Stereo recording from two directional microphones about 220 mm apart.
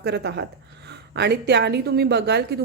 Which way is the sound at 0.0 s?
50° right (ahead or behind).